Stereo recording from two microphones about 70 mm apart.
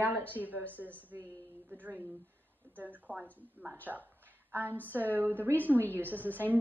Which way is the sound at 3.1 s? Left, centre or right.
Left.